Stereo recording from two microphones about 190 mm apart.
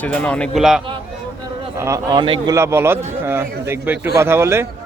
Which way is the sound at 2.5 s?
15° right (ahead or behind).